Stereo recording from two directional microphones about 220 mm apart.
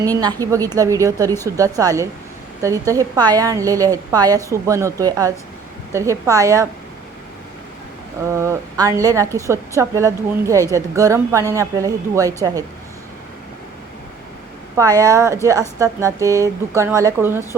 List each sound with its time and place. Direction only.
0.0 s a woman's voice: 15° right (ahead or behind)
8.3 s a woman's voice: 15° right (ahead or behind)
14.8 s a woman's voice: 15° right (ahead or behind)